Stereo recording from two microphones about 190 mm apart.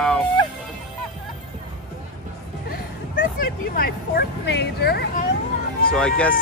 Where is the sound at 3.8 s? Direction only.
55° left (ahead or behind).